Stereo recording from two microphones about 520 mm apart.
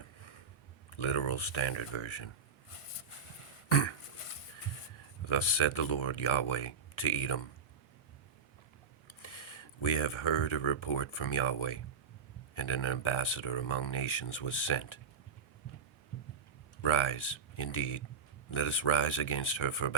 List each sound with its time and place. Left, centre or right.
0.9 s speech: left
3.7 s throat clearing: left
5.2 s speech: left
9.0 s speech: left
16.8 s speech: left